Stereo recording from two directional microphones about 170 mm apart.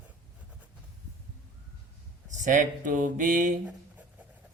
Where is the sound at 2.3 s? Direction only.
50° right (ahead or behind).